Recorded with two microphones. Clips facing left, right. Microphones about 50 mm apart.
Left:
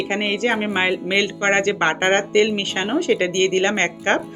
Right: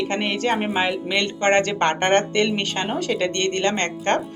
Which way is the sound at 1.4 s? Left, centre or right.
Centre.